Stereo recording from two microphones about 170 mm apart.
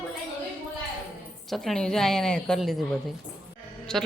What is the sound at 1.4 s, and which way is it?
A woman's voice, centre (ahead or behind).